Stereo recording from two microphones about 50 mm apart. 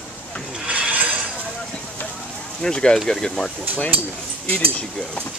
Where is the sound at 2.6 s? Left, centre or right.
Centre.